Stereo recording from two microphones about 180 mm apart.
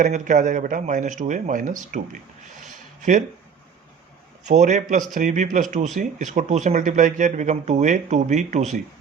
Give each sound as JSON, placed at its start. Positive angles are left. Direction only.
{"t": 0.0, "sound": "speech", "side_deg": -45}
{"t": 2.6, "sound": "a sound", "side_deg": -45}
{"t": 4.4, "sound": "speech", "side_deg": -40}